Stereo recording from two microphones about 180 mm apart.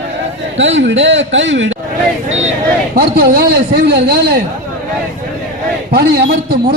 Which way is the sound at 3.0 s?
60° right (ahead or behind).